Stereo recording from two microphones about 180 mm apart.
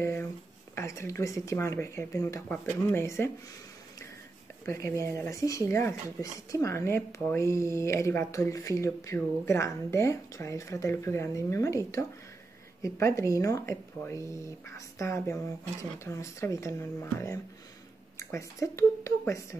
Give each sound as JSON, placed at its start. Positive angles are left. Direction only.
{"t": 0.0, "sound": "a sound", "side_deg": 10}
{"t": 0.7, "sound": "speech", "side_deg": 15}
{"t": 4.6, "sound": "speech", "side_deg": 15}